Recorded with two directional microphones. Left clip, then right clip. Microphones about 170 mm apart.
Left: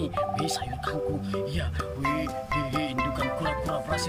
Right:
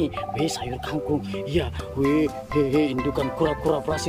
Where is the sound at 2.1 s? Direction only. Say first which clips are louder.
Right 5 dB; 15° right (ahead or behind).